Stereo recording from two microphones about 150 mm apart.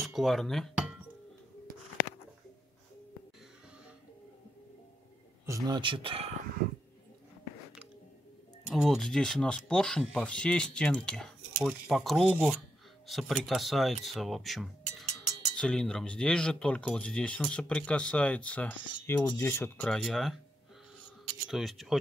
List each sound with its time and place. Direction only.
0.0 s chink: centre (ahead or behind)
5.5 s speech: 30° right (ahead or behind)
8.6 s speech: centre (ahead or behind); by 19.9 s 15° left (ahead or behind)
19.9 s speech: centre (ahead or behind)
21.5 s speech: centre (ahead or behind)